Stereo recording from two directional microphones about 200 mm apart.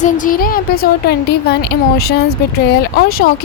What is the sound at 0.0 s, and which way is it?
Speech, 40° left (ahead or behind).